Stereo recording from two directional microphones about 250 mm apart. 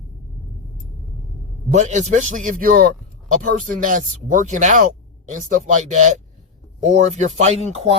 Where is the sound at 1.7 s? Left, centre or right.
Right.